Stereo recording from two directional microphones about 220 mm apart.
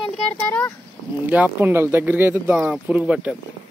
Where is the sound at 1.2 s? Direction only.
5° right (ahead or behind).